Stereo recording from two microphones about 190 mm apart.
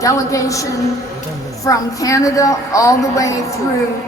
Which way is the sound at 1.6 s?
15° left (ahead or behind).